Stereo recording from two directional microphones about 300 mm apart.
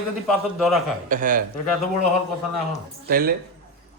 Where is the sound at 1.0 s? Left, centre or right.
Right.